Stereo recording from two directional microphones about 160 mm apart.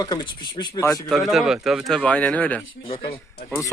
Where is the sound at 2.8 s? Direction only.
35° left (ahead or behind).